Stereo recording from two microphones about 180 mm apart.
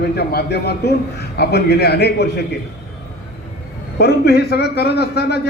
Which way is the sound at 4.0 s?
60° left (ahead or behind).